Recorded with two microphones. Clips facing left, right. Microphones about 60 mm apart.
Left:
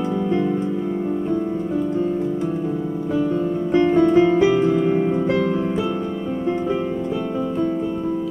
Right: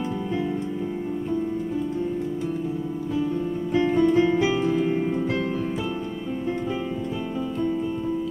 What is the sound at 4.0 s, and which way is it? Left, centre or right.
Music, left.